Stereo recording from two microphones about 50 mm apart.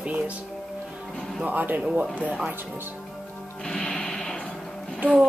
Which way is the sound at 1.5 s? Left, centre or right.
Right.